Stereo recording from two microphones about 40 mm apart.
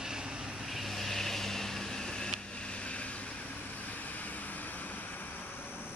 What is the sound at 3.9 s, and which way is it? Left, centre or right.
Vehicle, left.